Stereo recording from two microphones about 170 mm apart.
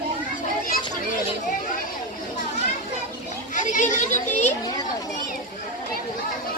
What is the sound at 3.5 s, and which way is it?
Speech, 45° left (ahead or behind).